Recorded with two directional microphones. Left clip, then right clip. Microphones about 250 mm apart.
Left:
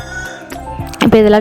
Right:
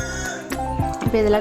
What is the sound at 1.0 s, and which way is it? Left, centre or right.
Music, left.